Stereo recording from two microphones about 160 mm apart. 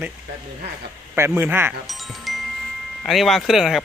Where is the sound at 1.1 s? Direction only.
15° right (ahead or behind).